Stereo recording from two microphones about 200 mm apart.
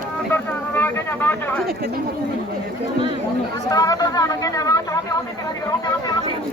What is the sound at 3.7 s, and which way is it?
Speech, 20° left (ahead or behind).